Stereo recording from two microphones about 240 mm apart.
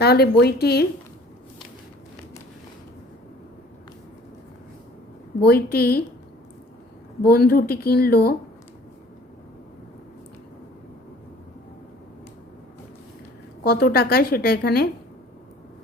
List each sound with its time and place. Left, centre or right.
0.0 s a woman's voice: left
5.4 s a woman's voice: left
7.2 s a woman's voice: left
13.7 s a woman's voice: left